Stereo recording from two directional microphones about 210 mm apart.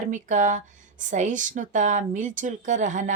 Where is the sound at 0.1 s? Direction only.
35° right (ahead or behind).